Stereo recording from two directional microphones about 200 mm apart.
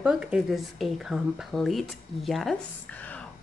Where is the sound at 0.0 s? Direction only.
5° right (ahead or behind).